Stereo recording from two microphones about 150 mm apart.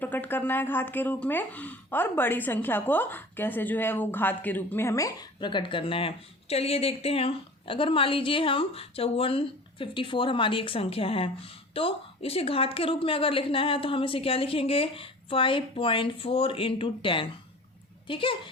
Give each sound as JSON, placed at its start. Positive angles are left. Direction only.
{"t": 0.0, "sound": "speech", "side_deg": 10}